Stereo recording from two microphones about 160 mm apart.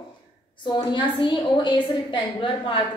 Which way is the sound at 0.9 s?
30° left (ahead or behind).